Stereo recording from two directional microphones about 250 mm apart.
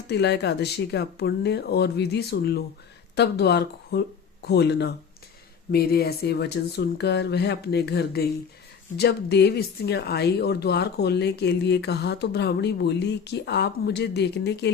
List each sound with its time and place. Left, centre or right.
0.1 s speech: left